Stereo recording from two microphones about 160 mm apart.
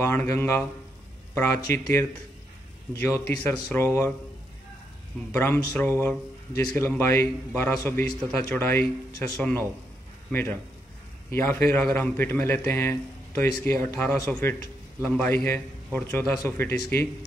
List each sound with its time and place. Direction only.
0.0 s a man's voice: 15° left (ahead or behind)
5.3 s a man's voice: 15° left (ahead or behind)